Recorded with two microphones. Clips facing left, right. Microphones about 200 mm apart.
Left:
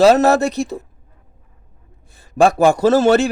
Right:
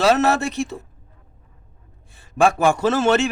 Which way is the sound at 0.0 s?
40° left (ahead or behind).